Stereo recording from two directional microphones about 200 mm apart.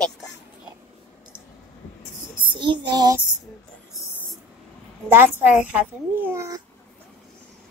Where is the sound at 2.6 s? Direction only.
25° right (ahead or behind).